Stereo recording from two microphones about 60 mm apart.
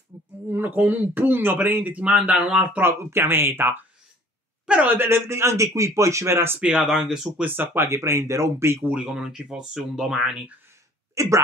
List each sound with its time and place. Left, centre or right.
0.5 s speech: right
2.8 s speech: right
4.8 s speech: right
6.8 s speech: centre
7.4 s speech: right
9.1 s speech: centre
11.1 s speech: right